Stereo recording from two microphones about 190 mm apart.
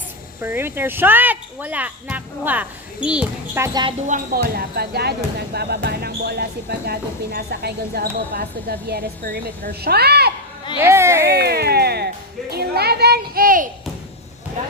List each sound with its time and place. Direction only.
0.3 s speech: 10° right (ahead or behind)
4.0 s speech: 45° right (ahead or behind)
10.8 s speech: 15° right (ahead or behind)
11.3 s speech: 55° right (ahead or behind)